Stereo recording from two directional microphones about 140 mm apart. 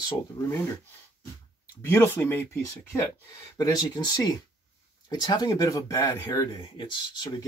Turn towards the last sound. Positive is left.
turn(degrees=35)  # may be behind; listen again after turning